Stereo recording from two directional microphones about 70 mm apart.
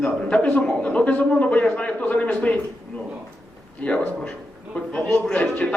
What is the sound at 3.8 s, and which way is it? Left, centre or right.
A man's voice, centre.